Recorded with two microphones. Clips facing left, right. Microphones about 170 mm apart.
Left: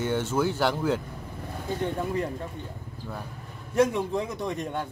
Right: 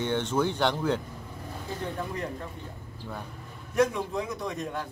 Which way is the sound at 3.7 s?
30° left (ahead or behind).